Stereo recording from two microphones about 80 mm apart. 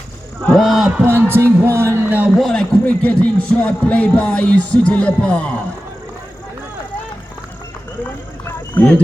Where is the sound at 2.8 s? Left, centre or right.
Centre.